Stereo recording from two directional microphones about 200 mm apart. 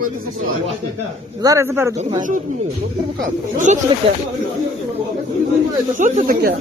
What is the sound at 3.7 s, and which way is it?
Speech, 35° right (ahead or behind).